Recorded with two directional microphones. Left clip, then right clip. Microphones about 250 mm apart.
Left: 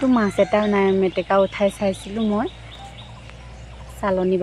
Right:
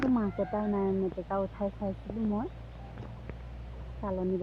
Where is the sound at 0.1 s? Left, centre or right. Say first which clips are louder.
Left 13 dB; left.